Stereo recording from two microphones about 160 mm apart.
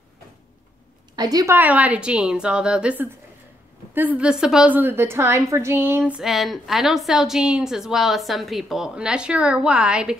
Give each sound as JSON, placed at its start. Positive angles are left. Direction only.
{"t": 1.1, "sound": "a woman's voice", "side_deg": -25}